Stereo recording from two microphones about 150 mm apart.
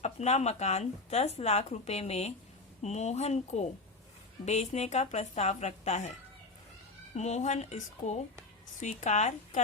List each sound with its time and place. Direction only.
0.0 s speech: 50° left (ahead or behind)